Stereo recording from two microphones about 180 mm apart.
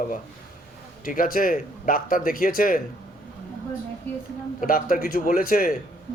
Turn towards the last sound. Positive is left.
turn(degrees=50)  # may be behind; listen again after turning